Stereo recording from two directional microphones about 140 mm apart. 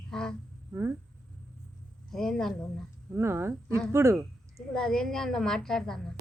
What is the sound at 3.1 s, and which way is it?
Speech, 20° right (ahead or behind).